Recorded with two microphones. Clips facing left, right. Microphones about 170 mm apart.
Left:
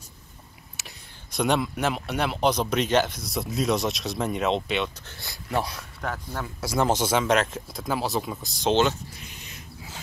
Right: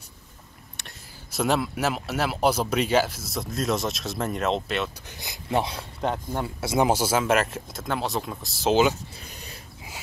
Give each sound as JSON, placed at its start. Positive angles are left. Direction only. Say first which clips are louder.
{"t": 0.7, "sound": "speech", "louder": "right 1 dB", "side_deg": 0}
{"t": 5.2, "sound": "speech", "louder": "right 2 dB", "side_deg": -20}
{"t": 6.9, "sound": "speech", "louder": "even", "side_deg": -5}
{"t": 9.2, "sound": "dog", "louder": "right 2 dB", "side_deg": -35}